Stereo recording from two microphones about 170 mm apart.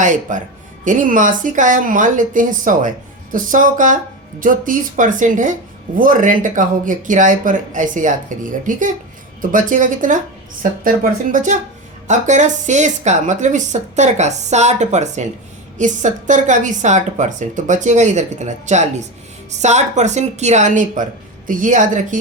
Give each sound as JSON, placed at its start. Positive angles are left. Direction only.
{"t": 0.0, "sound": "speech", "side_deg": -50}